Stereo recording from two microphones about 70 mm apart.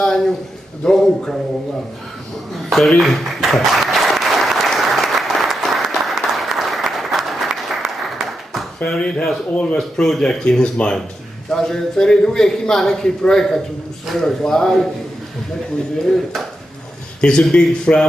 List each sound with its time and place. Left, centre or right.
0.8 s speech: centre
2.7 s applause: centre
8.8 s a man's voice: centre
17.2 s a man's voice: centre